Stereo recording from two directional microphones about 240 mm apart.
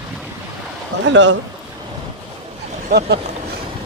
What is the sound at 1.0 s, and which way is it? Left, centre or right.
Speech, right.